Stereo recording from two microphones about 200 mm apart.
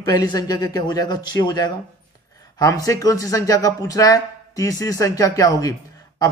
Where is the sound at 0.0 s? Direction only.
20° left (ahead or behind).